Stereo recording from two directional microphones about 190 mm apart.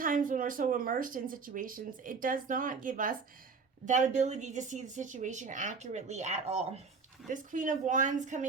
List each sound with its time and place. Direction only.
0.0 s speech: 45° right (ahead or behind)